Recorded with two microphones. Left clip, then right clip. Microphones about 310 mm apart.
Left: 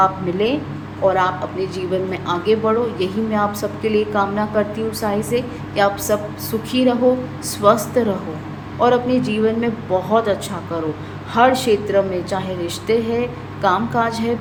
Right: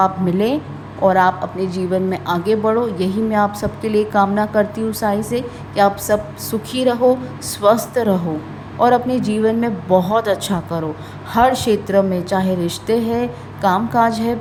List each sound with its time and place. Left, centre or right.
0.0 s a woman's voice: right